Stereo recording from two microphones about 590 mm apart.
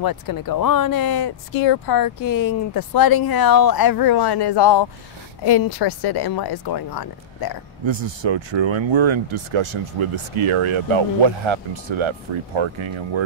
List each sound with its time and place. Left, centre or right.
0.0 s speech: left
7.8 s speech: right